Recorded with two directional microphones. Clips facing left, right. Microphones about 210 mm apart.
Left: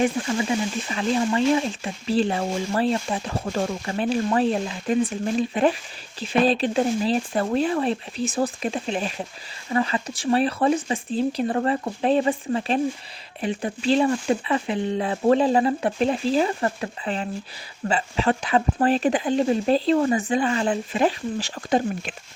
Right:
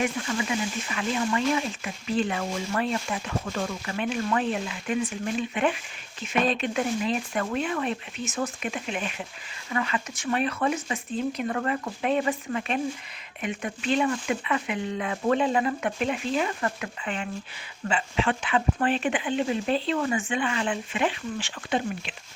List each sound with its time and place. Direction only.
0.0 s speech: 30° left (ahead or behind)